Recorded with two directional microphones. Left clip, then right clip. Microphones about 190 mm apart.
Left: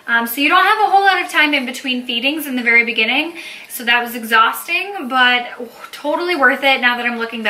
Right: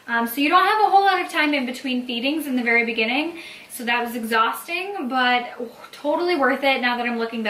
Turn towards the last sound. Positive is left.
turn(degrees=-10)  # may be behind; listen again after turning